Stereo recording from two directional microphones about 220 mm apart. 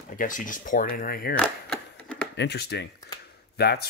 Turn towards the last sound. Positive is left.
turn(degrees=45)  # may be behind; listen again after turning